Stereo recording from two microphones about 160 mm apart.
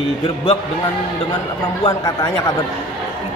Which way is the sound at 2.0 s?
20° left (ahead or behind).